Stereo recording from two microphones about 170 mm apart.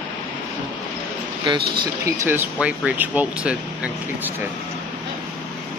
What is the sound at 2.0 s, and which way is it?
Speech, 15° right (ahead or behind).